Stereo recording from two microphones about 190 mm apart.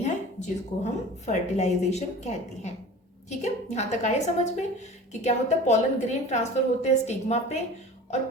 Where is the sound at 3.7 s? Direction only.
35° left (ahead or behind).